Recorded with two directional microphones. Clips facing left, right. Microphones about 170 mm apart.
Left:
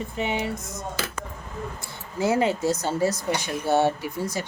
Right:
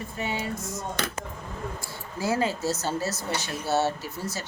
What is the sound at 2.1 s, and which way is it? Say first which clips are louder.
A woman's voice: left 4 dB; 20° left (ahead or behind).